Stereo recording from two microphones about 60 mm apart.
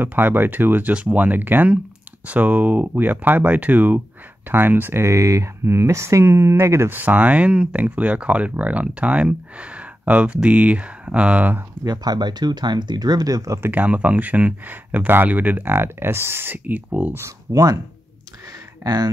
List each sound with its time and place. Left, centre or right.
0.0 s speech: right
5.0 s speech: right
6.9 s speech: right
12.1 s speech: right
13.2 s speech: right
13.6 s speech: right
17.5 s speech: right
18.8 s speech: right